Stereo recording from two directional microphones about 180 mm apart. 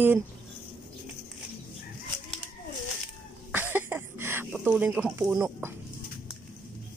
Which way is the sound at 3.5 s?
10° right (ahead or behind).